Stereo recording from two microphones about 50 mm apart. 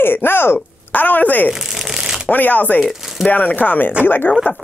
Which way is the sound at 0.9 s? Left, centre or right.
Left.